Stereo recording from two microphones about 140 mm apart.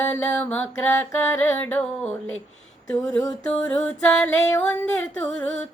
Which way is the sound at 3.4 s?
5° left (ahead or behind).